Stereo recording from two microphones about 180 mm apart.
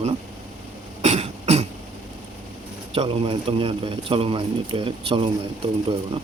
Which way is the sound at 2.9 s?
30° right (ahead or behind).